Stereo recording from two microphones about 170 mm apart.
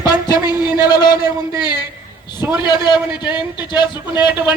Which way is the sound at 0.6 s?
25° left (ahead or behind).